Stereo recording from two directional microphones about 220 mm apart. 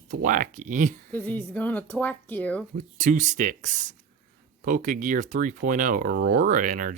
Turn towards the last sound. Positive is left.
turn(degrees=-35)  # may be behind; listen again after turning